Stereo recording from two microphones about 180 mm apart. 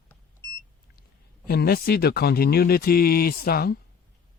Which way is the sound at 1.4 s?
60° left (ahead or behind).